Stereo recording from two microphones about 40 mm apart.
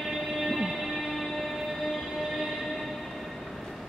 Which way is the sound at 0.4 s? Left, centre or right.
Centre.